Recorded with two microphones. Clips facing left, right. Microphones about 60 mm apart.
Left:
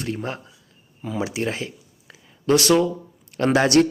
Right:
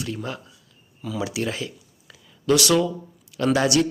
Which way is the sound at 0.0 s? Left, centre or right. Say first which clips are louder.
Left 2 dB; left.